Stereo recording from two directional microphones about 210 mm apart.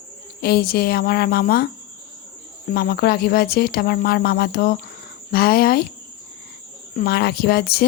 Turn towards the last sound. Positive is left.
turn(degrees=50)  # may be behind; listen again after turning